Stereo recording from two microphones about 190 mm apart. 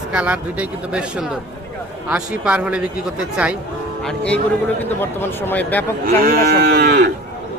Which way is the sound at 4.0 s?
5° left (ahead or behind).